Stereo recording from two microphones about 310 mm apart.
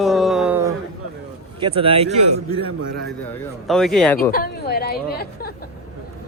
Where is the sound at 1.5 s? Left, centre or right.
Centre.